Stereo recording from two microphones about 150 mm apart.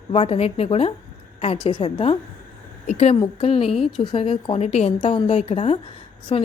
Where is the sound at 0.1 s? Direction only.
40° left (ahead or behind).